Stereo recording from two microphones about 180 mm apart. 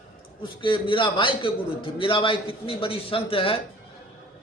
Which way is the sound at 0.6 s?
25° left (ahead or behind).